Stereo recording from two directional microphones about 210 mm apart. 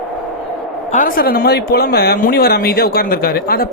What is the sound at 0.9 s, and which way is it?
Speech, 40° left (ahead or behind).